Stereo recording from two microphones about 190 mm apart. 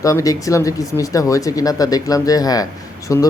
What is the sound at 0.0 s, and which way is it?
Speech, 20° left (ahead or behind).